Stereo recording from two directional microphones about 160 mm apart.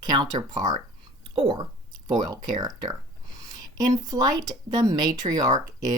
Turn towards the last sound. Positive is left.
turn(degrees=-20)  # may be behind; listen again after turning